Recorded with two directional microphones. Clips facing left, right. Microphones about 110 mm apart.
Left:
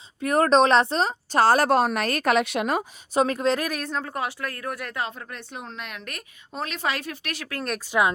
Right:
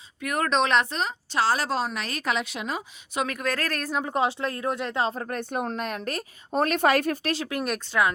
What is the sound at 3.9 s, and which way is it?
Speech, 20° right (ahead or behind).